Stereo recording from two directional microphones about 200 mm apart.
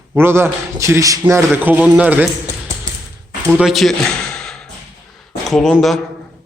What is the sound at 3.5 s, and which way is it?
A man's voice, 5° right (ahead or behind).